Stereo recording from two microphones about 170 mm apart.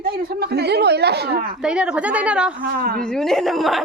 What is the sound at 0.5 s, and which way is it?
Speech, 75° right (ahead or behind).